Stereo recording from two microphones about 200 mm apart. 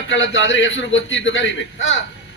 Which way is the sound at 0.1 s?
65° left (ahead or behind).